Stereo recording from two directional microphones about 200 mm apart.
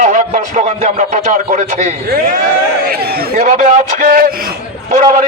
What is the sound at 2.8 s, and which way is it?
A man's voice, 50° right (ahead or behind).